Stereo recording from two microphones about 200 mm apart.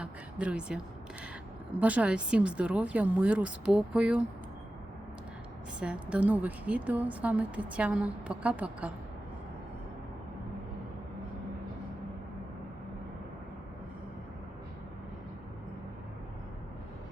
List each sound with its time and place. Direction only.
0.0 s a sound: 5° right (ahead or behind)
1.7 s speech: 5° right (ahead or behind)
5.8 s a woman's voice: 5° right (ahead or behind)